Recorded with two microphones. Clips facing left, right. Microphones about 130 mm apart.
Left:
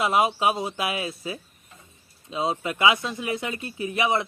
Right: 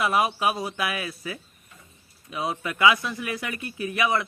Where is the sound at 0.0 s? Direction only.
25° left (ahead or behind).